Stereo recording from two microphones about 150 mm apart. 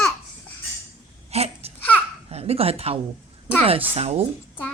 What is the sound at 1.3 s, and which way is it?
Baby cry, 45° right (ahead or behind).